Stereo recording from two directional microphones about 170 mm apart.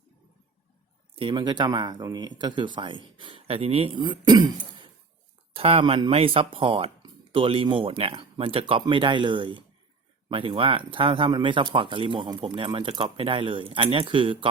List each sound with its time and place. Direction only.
1.1 s speech: 30° right (ahead or behind)